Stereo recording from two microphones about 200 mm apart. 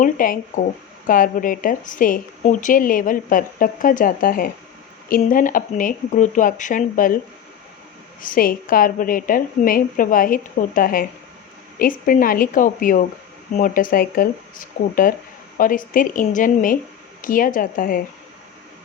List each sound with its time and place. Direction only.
0.0 s speech: 40° left (ahead or behind)
8.2 s speech: 45° left (ahead or behind)